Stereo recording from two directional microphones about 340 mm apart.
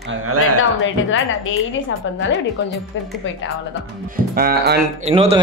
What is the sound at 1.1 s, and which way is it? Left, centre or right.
Speech, left.